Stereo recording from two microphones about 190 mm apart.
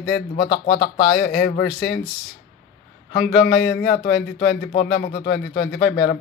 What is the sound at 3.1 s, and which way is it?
A man's voice, 55° left (ahead or behind).